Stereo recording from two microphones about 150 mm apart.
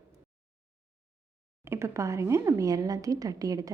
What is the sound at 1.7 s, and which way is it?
A woman's voice, 20° right (ahead or behind).